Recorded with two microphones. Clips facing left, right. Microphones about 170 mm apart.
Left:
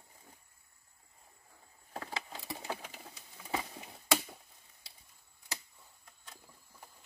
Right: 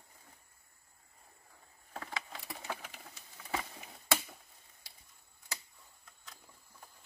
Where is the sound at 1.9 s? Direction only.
25° left (ahead or behind).